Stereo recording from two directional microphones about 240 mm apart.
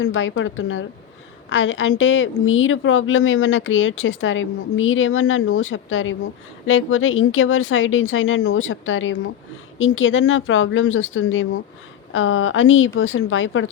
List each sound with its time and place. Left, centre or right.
0.0 s a woman's voice: left